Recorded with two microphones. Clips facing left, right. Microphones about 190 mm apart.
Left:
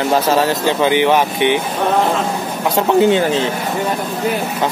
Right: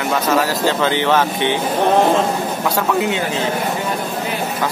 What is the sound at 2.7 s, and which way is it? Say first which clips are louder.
Speech: left 8 dB; 30° left (ahead or behind).